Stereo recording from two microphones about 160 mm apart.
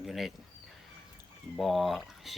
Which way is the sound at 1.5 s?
Centre (ahead or behind).